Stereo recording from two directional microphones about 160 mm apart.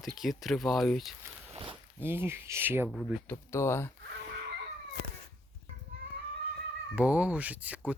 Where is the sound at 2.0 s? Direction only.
15° right (ahead or behind).